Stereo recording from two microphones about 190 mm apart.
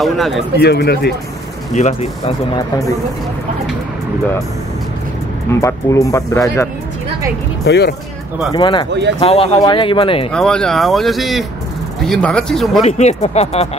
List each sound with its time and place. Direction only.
0.0 s speech: centre (ahead or behind)
0.6 s speech: 60° left (ahead or behind)
1.7 s speech: 35° left (ahead or behind)
5.5 s speech: 15° left (ahead or behind)
7.6 s speech: 60° left (ahead or behind)
8.5 s speech: 25° left (ahead or behind)
10.3 s speech: 5° left (ahead or behind)
12.8 s speech: 35° left (ahead or behind)